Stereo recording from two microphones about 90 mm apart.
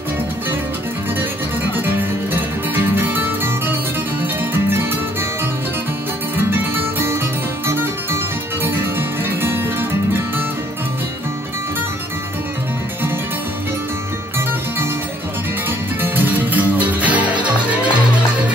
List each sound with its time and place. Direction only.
1.7 s music: 20° right (ahead or behind)
6.3 s music: 25° right (ahead or behind)
16.0 s music: 20° right (ahead or behind)